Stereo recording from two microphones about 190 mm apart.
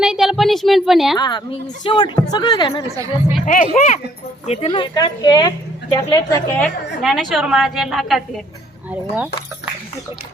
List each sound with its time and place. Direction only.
0.0 s a sound: centre (ahead or behind)
1.1 s a woman's voice: 25° left (ahead or behind)
2.9 s speech: 15° right (ahead or behind)
3.8 s a woman's voice: 40° left (ahead or behind); by 6.7 s 15° left (ahead or behind)
7.0 s a woman's voice: centre (ahead or behind)